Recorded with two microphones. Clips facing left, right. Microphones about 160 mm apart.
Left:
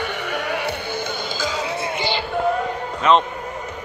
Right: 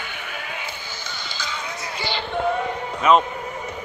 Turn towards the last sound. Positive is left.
turn(degrees=-5)  # may be behind; listen again after turning